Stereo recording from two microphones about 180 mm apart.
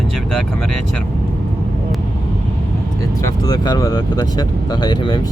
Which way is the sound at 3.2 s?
20° left (ahead or behind).